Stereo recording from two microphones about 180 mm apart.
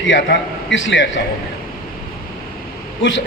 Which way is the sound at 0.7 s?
90° left.